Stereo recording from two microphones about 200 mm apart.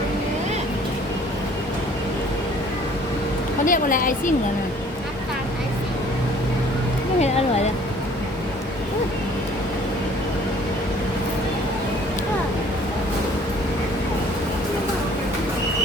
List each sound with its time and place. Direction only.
3.7 s a woman's voice: 40° left (ahead or behind)